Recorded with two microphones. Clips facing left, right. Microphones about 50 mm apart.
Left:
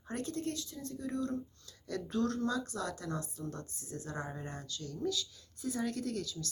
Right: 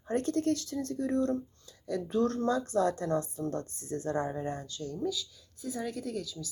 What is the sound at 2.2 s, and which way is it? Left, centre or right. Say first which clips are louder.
Speech: right 5 dB; right.